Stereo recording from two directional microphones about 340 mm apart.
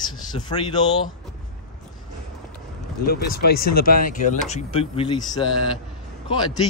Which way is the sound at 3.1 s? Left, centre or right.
Left.